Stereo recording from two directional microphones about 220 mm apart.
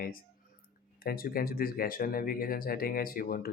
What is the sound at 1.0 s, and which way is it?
Speech, 40° left (ahead or behind).